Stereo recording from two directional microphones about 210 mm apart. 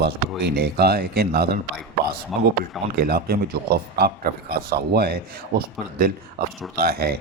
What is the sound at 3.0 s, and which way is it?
A man's voice, 45° right (ahead or behind).